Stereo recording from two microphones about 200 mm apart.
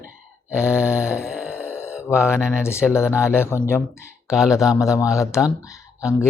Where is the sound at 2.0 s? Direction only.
10° left (ahead or behind).